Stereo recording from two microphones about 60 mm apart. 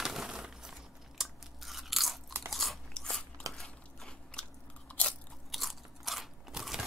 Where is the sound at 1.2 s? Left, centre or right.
Centre.